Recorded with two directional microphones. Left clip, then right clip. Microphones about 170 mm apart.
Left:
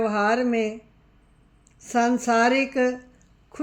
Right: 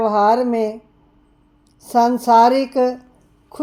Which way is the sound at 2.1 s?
20° right (ahead or behind).